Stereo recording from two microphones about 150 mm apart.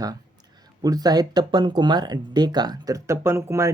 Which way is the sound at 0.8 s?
25° right (ahead or behind).